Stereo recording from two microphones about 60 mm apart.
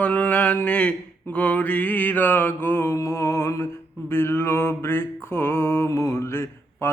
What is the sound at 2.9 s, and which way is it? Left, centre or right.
Music, left.